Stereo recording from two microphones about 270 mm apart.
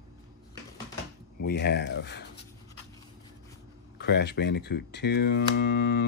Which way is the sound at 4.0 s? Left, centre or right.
Left.